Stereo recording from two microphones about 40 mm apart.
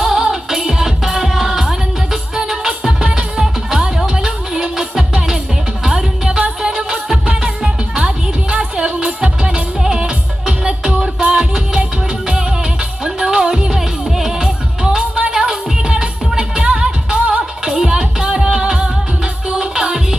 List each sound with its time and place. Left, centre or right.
0.0 s music: centre; by 9.6 s right
9.7 s music: centre
13.7 s music: centre